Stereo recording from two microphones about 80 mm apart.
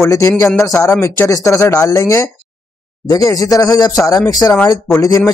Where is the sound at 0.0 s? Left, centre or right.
Left.